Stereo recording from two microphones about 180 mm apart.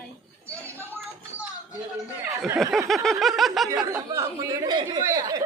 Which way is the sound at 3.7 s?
20° right (ahead or behind).